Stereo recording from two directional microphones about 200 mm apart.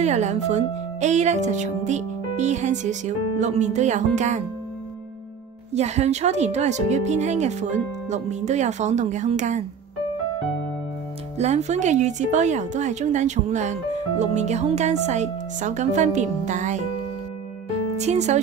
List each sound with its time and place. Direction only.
0.0 s speech: 35° right (ahead or behind)
5.8 s speech: 35° right (ahead or behind)
11.3 s speech: 35° right (ahead or behind)
17.9 s speech: 35° right (ahead or behind)